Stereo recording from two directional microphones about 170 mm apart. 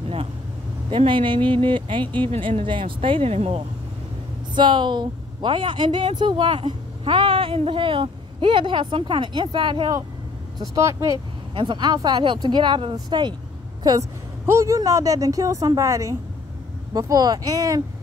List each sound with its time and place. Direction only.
0.8 s a woman's voice: 30° right (ahead or behind)